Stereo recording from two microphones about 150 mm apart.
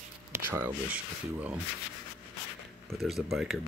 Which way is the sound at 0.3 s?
15° right (ahead or behind).